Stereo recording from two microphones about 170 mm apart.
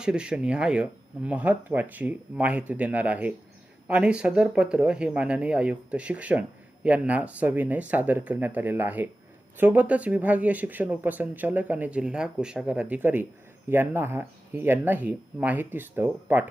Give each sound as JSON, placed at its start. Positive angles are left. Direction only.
{"t": 0.0, "sound": "speech", "side_deg": -5}